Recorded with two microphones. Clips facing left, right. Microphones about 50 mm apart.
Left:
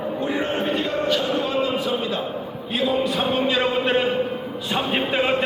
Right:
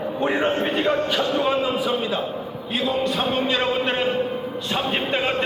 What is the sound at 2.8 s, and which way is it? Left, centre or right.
Music, centre.